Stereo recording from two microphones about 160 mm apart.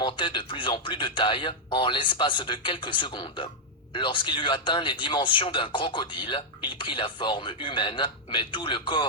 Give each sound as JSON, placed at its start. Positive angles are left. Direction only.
{"t": 0.0, "sound": "speech", "side_deg": 30}